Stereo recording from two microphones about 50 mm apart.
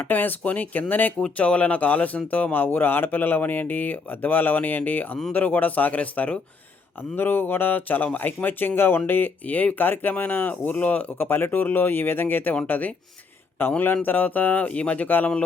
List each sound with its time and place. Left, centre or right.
0.0 s speech: left
1.2 s speech: left
7.2 s speech: left
9.5 s speech: left
11.1 s speech: left
13.6 s speech: left